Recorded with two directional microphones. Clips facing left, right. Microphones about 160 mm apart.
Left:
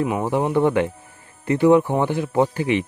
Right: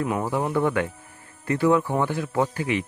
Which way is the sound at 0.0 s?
15° left (ahead or behind).